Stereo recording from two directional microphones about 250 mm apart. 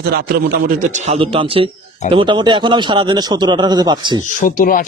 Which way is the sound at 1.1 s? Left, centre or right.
Right.